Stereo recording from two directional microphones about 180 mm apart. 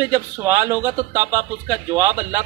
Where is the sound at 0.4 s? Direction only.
15° right (ahead or behind).